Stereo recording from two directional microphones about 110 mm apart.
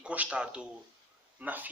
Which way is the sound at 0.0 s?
10° right (ahead or behind).